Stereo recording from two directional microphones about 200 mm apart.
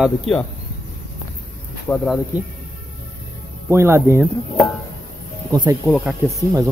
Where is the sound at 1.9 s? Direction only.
5° left (ahead or behind).